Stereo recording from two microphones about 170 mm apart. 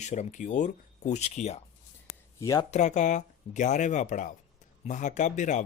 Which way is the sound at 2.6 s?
45° left (ahead or behind).